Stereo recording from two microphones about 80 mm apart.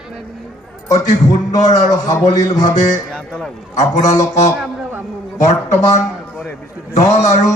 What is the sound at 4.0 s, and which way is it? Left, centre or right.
A man's voice, left.